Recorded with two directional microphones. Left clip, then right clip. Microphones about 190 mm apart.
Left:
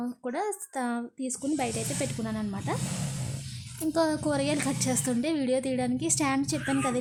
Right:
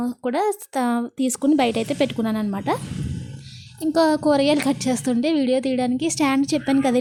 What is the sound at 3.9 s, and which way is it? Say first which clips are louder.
A woman's voice: right 9 dB; 30° right (ahead or behind).